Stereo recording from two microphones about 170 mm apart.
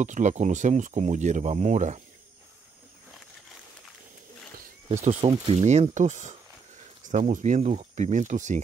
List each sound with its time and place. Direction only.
0.0 s speech: 45° right (ahead or behind)
5.0 s speech: 40° right (ahead or behind)